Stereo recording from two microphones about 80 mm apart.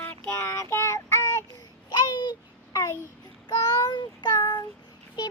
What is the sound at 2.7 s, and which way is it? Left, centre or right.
Child singing, left.